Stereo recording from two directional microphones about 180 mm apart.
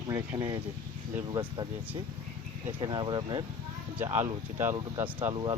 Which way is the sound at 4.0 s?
15° right (ahead or behind).